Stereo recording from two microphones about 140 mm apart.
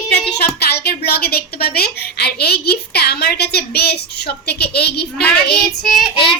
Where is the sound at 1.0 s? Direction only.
90° left.